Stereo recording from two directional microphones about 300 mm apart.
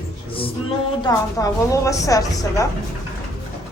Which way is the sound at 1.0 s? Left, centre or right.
Centre.